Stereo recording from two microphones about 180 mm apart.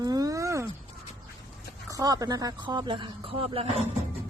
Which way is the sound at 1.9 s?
20° right (ahead or behind).